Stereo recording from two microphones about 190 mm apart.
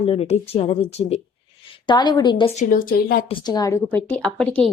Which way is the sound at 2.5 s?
45° left (ahead or behind).